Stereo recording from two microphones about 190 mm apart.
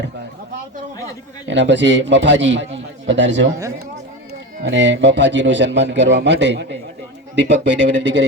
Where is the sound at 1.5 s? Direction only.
70° right (ahead or behind).